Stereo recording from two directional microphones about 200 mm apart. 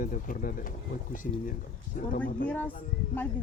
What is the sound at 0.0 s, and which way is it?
Speech, 40° left (ahead or behind).